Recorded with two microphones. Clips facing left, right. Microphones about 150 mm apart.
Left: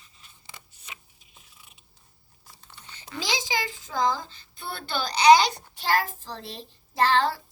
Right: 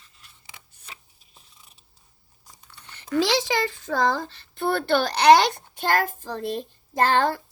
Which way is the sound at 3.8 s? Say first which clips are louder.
Right 1 dB; 60° right (ahead or behind).